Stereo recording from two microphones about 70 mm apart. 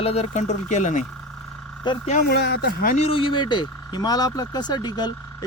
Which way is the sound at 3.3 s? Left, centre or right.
Left.